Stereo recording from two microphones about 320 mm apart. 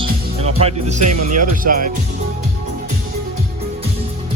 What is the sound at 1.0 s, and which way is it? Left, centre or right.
Speech, right.